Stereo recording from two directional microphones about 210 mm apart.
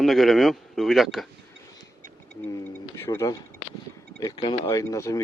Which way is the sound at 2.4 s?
15° left (ahead or behind).